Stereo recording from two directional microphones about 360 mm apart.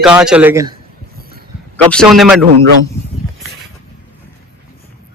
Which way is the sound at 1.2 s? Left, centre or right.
Right.